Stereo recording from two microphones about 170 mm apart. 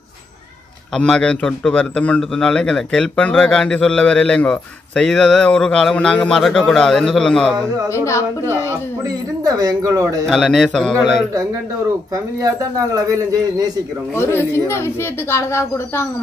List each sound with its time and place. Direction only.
0.9 s a man's voice: 5° left (ahead or behind)
7.9 s speech: 15° left (ahead or behind)
9.0 s speech: 20° right (ahead or behind)
10.2 s a man's voice: 5° left (ahead or behind)
12.1 s speech: 20° right (ahead or behind)
14.1 s speech: 15° left (ahead or behind)